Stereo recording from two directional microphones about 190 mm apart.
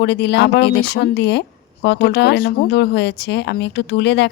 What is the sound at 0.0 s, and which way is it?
Speech, 65° left (ahead or behind).